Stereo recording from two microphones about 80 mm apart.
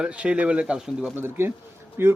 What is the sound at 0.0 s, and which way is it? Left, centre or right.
Speech, centre.